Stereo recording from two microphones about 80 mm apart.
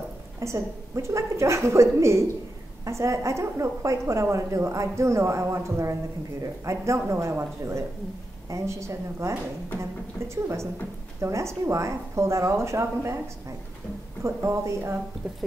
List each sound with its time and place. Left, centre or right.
0.4 s a woman's voice: right
14.2 s a woman's voice: right